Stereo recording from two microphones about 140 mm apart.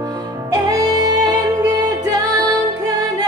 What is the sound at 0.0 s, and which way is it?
Music, 30° right (ahead or behind).